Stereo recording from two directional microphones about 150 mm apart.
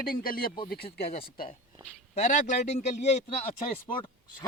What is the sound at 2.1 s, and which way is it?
A man's voice, 50° left (ahead or behind).